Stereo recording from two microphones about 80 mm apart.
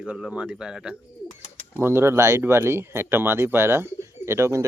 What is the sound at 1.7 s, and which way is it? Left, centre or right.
Speech, right.